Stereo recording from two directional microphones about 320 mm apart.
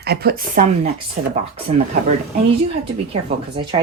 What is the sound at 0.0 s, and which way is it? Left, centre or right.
Speech, right.